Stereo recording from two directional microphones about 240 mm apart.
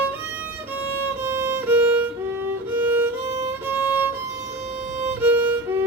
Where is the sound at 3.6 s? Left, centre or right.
Centre.